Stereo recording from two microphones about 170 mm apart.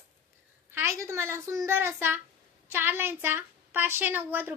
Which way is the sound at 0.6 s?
15° right (ahead or behind).